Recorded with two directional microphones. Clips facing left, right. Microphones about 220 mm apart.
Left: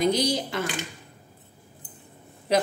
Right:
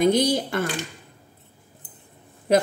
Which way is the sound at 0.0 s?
50° right (ahead or behind).